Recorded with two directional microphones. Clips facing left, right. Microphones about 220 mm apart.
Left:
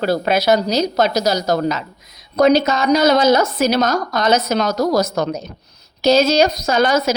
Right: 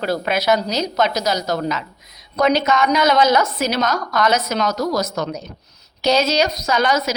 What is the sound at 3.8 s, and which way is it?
Speech, 45° left (ahead or behind).